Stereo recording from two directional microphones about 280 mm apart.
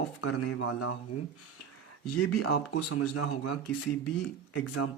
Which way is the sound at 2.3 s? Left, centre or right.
Left.